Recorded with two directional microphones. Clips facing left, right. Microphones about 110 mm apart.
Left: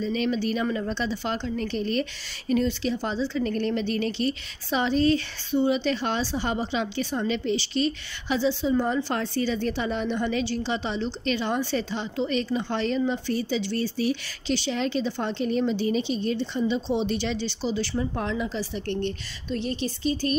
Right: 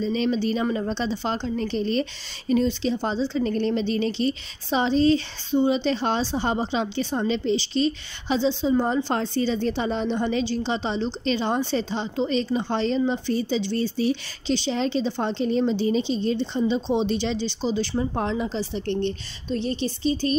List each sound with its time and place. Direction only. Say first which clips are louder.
0.0 s a woman's voice: right 2 dB; 30° right (ahead or behind)